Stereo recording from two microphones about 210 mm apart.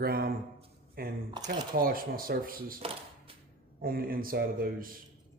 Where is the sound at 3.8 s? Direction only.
45° right (ahead or behind).